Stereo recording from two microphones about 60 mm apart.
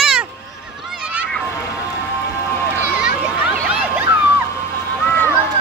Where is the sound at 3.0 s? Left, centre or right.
Right.